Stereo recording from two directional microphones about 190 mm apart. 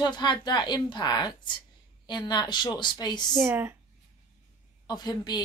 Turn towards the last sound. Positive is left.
turn(degrees=20)  # may be behind; listen again after turning